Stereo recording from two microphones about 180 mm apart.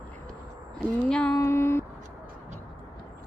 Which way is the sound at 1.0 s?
5° left (ahead or behind).